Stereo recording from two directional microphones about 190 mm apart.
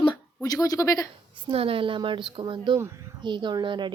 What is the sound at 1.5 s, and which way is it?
Speech, 30° right (ahead or behind).